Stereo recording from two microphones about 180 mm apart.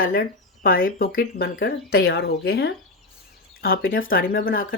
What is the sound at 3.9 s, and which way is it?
Speech, 50° left (ahead or behind).